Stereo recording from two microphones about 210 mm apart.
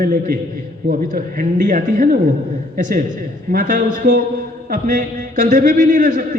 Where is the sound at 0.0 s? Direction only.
40° right (ahead or behind).